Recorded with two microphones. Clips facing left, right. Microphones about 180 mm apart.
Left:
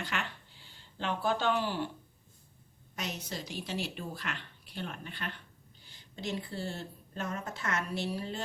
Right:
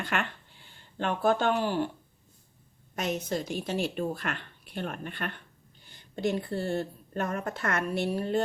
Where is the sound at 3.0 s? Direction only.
50° right (ahead or behind).